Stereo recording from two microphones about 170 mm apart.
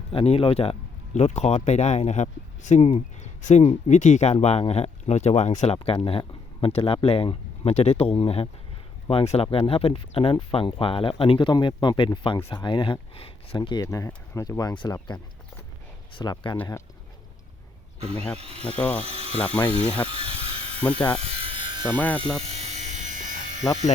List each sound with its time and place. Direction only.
0.1 s speech: 35° left (ahead or behind)
12.4 s speech: 15° left (ahead or behind)
12.6 s speech: 30° left (ahead or behind)
18.3 s speech: 35° right (ahead or behind)
18.8 s speech: 5° left (ahead or behind)
19.0 s speech: 35° right (ahead or behind)
20.1 s mechanisms: 35° right (ahead or behind)
21.2 s electric shaver: 35° right (ahead or behind)
21.8 s speech: 10° left (ahead or behind)
22.5 s electric shaver: 40° right (ahead or behind)